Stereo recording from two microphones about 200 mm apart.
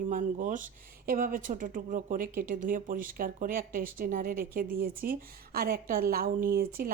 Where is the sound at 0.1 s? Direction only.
40° right (ahead or behind).